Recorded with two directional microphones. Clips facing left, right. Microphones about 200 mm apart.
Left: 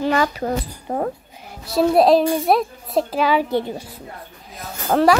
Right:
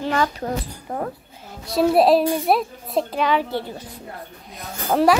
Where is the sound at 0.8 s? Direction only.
30° left (ahead or behind).